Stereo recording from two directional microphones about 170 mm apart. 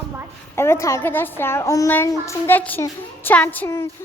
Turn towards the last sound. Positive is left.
turn(degrees=10)  # may be behind; listen again after turning